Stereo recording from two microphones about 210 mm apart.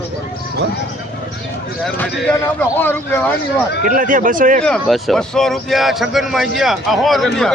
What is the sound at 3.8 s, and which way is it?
Speech, 40° right (ahead or behind).